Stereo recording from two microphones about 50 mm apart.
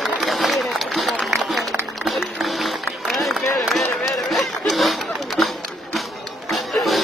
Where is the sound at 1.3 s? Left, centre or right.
Centre.